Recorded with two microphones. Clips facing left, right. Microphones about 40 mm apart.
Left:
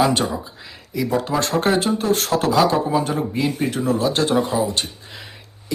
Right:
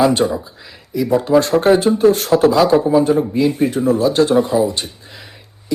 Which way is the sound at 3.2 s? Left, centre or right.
Left.